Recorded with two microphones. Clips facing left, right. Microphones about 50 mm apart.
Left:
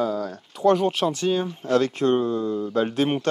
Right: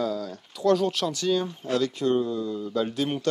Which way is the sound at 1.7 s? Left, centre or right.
Left.